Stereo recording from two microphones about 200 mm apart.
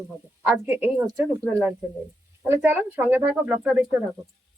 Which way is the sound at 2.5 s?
10° right (ahead or behind).